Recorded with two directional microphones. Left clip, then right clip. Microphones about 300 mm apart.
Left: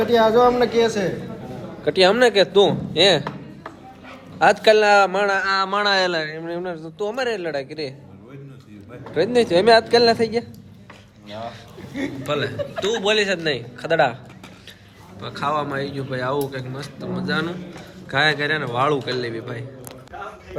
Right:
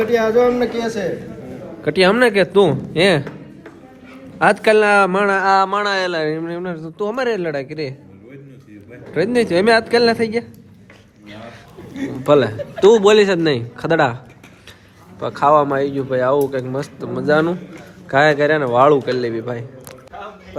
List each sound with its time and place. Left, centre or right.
0.1 s speech: centre
0.6 s a man's voice: left
1.8 s a man's voice: right
4.4 s a man's voice: centre
5.5 s speech: centre
6.7 s a man's voice: centre
9.1 s a man's voice: right
12.2 s a man's voice: centre
15.2 s speech: centre